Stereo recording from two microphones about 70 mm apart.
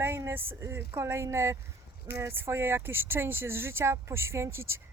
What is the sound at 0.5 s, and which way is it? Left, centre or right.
Speech, right.